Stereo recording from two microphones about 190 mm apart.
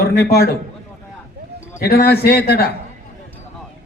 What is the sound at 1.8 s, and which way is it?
Speech, 55° left (ahead or behind).